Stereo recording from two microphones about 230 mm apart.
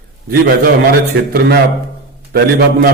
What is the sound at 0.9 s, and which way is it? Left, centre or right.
Speech, right.